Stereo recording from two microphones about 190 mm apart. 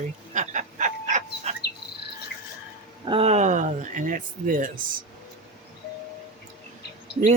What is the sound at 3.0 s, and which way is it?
Speech, 30° right (ahead or behind).